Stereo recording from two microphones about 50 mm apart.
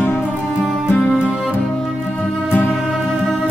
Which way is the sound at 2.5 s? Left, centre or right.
Left.